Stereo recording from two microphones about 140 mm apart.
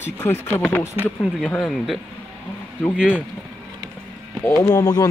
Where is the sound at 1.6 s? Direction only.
Centre (ahead or behind).